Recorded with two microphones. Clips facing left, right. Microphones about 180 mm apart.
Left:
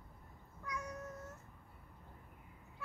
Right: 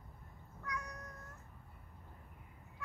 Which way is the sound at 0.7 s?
25° left (ahead or behind).